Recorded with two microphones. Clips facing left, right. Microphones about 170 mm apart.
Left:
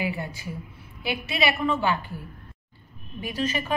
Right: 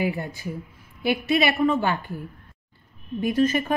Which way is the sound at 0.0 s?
50° right (ahead or behind).